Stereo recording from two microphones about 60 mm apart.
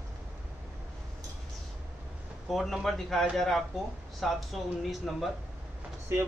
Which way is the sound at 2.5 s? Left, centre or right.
Centre.